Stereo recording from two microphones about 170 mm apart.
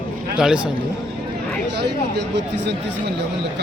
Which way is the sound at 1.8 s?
85° right.